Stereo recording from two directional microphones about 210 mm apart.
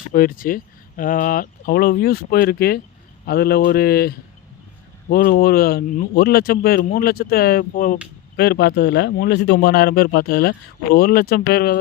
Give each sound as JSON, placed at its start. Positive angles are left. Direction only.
{"t": 0.1, "sound": "speech", "side_deg": 40}
{"t": 8.4, "sound": "speech", "side_deg": 50}